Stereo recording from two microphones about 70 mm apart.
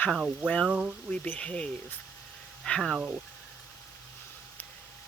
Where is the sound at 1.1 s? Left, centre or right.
Left.